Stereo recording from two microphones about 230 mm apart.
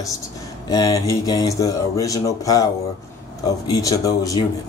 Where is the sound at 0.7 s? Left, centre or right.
Centre.